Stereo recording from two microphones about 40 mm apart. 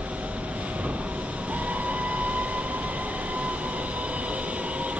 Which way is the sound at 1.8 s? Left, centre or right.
Right.